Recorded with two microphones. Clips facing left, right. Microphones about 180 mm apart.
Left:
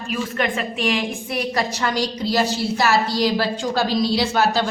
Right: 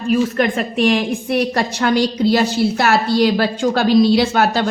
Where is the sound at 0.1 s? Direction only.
45° right (ahead or behind).